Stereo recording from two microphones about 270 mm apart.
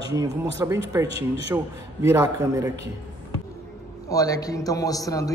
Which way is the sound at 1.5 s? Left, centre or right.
Centre.